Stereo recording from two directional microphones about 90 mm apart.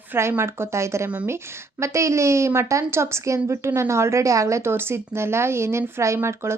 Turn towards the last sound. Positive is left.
turn(degrees=-30)  # may be behind; listen again after turning